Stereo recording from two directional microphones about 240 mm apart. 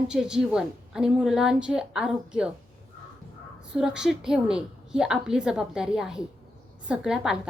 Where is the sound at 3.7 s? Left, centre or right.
Centre.